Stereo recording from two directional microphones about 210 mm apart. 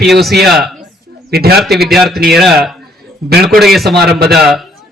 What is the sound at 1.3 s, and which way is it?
Speech, 50° right (ahead or behind).